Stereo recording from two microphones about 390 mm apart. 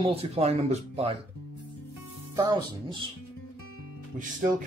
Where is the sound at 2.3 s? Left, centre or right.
Centre.